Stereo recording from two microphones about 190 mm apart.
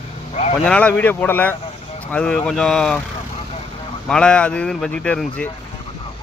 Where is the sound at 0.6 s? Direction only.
5° left (ahead or behind).